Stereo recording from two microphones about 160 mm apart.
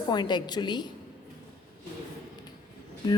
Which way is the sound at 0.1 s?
25° left (ahead or behind).